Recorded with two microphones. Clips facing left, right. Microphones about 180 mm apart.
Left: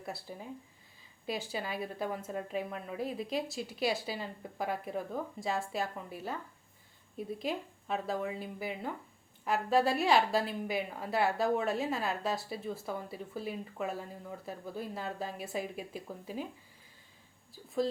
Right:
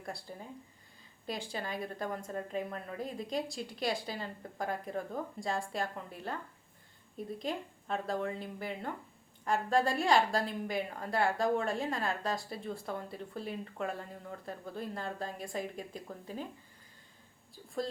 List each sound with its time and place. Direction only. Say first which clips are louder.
0.0 s a woman's voice: left 1 dB; 5° left (ahead or behind)